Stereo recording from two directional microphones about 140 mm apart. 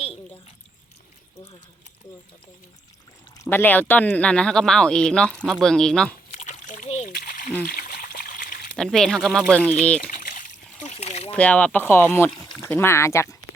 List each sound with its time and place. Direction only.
3.5 s speech: 15° left (ahead or behind)
6.3 s splash: 60° left (ahead or behind)
7.1 s a sound: 90° left
7.6 s trickle: 90° left
8.7 s speech: 5° left (ahead or behind)
10.2 s splash: 85° left
10.8 s a sound: 45° left (ahead or behind)
11.3 s speech: 10° left (ahead or behind)